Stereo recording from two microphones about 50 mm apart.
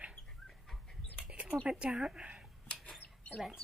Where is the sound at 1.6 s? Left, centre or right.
Centre.